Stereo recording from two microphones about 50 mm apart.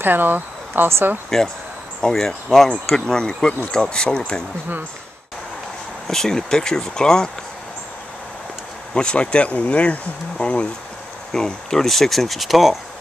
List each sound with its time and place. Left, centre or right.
0.0 s speech: right
1.3 s speech: centre
6.0 s speech: centre
8.9 s speech: left
11.3 s speech: centre